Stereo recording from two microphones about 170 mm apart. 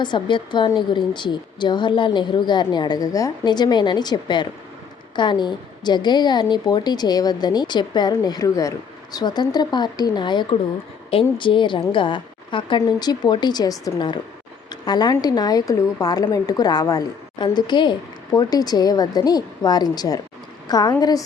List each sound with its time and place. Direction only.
0.0 s a woman's voice: 25° left (ahead or behind)